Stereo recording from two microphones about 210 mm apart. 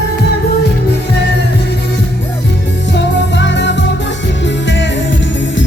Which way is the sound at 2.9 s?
55° left (ahead or behind).